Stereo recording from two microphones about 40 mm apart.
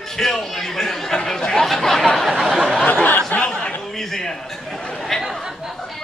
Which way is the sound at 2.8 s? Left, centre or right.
Left.